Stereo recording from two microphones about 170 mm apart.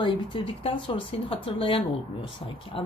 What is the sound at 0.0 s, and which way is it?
A woman's voice, 30° left (ahead or behind).